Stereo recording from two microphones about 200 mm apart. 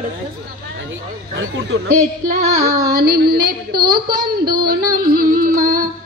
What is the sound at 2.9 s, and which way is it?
Speech, 50° right (ahead or behind).